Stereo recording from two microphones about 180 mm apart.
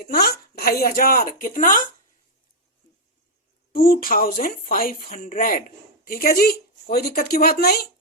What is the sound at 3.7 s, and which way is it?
Speech, 55° left (ahead or behind).